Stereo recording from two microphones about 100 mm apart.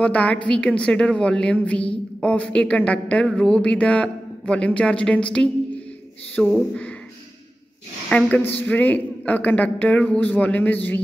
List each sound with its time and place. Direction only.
0.0 s a woman's voice: 15° left (ahead or behind)
6.5 s a woman's voice: 10° left (ahead or behind)
8.1 s a woman's voice: 10° left (ahead or behind)